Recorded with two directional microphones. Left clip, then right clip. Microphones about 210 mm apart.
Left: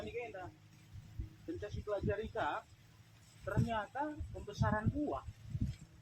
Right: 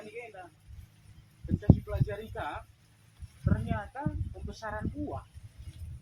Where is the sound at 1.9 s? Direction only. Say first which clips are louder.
Even; 20° right (ahead or behind).